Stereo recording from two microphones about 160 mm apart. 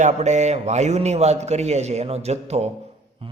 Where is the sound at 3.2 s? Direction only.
35° right (ahead or behind).